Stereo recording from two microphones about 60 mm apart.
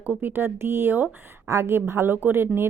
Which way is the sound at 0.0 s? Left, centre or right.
Right.